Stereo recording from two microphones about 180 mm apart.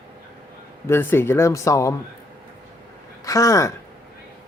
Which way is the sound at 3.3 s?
20° left (ahead or behind).